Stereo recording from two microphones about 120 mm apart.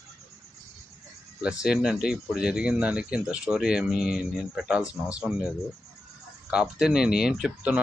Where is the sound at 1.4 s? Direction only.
5° right (ahead or behind).